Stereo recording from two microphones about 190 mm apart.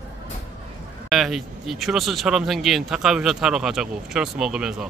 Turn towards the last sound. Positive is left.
turn(degrees=-5)  # may be behind; listen again after turning